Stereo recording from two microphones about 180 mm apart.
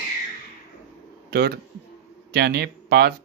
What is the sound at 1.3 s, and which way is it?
Speech, 60° right (ahead or behind).